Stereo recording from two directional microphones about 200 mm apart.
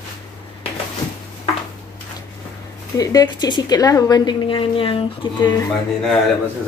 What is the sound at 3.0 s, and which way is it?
Speech, 20° left (ahead or behind).